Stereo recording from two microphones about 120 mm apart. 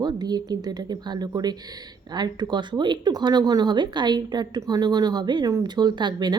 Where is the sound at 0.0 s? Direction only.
35° right (ahead or behind).